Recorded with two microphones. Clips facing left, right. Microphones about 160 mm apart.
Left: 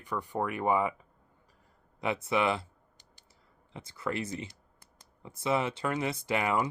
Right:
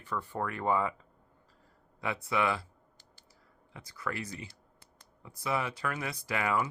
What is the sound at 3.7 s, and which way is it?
Speech, 25° left (ahead or behind).